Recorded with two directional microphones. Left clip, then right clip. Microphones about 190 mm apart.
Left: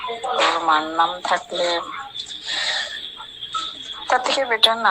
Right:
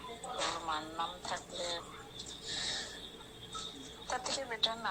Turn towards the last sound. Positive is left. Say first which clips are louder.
# left 18 dB
turn(degrees=40)  # may be behind; listen again after turning